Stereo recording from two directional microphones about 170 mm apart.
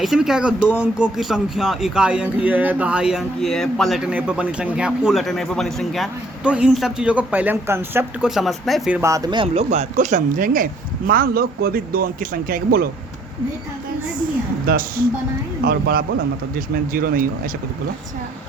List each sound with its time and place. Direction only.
0.0 s speech: centre (ahead or behind)
8.4 s speech: centre (ahead or behind)
9.0 s speech: 20° right (ahead or behind)
9.6 s a man's voice: 45° right (ahead or behind)
14.7 s a man's voice: 60° right (ahead or behind)